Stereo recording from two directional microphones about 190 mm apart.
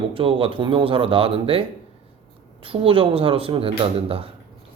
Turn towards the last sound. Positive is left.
turn(degrees=-30)  # may be behind; listen again after turning